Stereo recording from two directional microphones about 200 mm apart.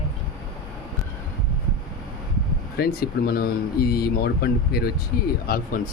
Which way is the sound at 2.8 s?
50° left (ahead or behind).